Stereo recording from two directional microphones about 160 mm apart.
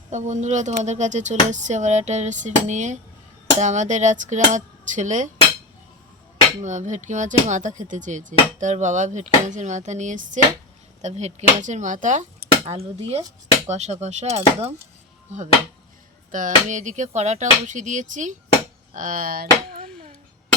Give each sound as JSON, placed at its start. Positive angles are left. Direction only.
{"t": 0.1, "sound": "speech", "side_deg": -50}
{"t": 6.6, "sound": "speech", "side_deg": -50}
{"t": 12.6, "sound": "speech", "side_deg": -40}